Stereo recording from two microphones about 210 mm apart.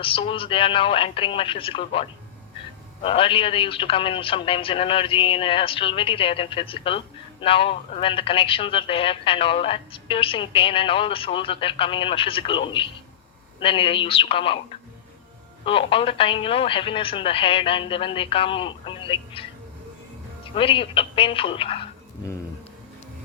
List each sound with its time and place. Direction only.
0.0 s a woman's voice: 25° left (ahead or behind)